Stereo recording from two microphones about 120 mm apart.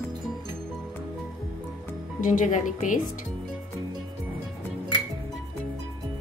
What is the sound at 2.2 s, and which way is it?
Speech, 90° left.